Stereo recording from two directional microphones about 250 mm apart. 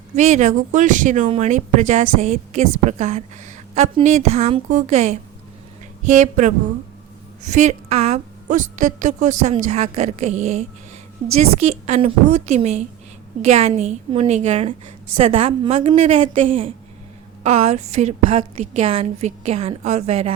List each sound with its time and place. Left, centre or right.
0.2 s a woman's voice: right